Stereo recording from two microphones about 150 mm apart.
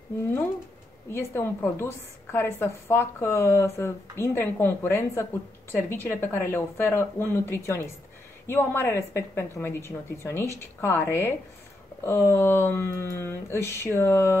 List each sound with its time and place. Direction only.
1.1 s a woman's voice: 15° left (ahead or behind)